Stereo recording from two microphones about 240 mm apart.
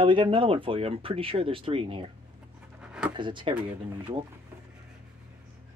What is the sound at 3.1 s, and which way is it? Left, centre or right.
Speech, centre.